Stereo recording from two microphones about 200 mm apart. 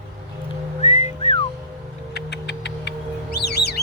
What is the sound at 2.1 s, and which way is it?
Music, 60° left (ahead or behind).